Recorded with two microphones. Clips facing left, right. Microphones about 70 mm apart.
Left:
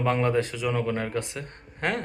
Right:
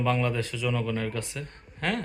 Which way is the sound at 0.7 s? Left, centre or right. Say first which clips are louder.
Left 3 dB; left.